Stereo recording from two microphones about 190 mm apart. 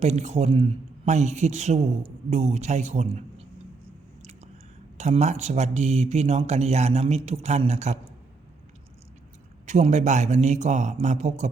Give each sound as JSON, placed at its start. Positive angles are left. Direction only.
{"t": 0.0, "sound": "speech", "side_deg": -35}
{"t": 4.9, "sound": "speech", "side_deg": -35}
{"t": 9.6, "sound": "speech", "side_deg": -40}